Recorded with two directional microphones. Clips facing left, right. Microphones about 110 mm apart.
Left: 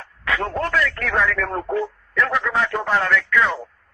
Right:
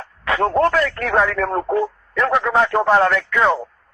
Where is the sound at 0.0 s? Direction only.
30° right (ahead or behind).